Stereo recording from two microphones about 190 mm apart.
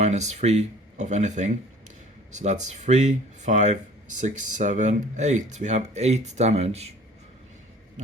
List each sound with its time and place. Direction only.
0.0 s speech: 35° right (ahead or behind)